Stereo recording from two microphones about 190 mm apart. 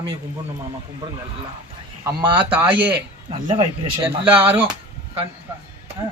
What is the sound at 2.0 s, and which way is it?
Speech, 15° right (ahead or behind).